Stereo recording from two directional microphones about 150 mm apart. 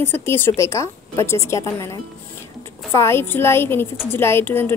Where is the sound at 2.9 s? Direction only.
15° left (ahead or behind).